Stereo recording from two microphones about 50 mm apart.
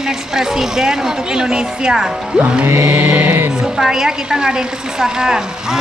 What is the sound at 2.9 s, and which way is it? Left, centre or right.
Music, right.